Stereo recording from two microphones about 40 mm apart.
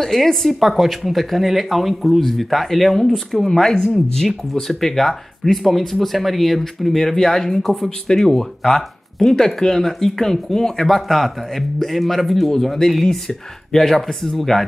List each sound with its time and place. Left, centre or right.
0.0 s speech: centre
13.0 s speech: centre